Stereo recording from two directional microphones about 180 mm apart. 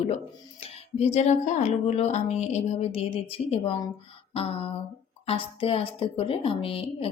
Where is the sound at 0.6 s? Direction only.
35° left (ahead or behind).